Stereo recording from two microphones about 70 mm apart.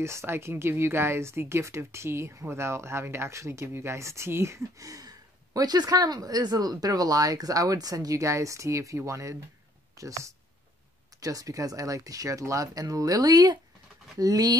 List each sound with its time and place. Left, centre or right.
0.0 s speech: right
4.7 s speech: right